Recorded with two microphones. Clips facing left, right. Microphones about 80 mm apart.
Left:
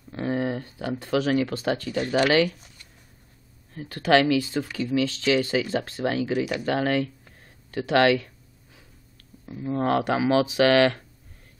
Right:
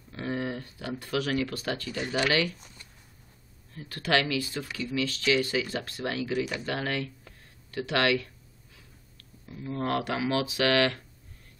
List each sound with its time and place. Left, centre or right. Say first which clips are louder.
0.1 s speech: left 6 dB; left
3.9 s speech: left 7 dB; left
9.5 s speech: left 6 dB; left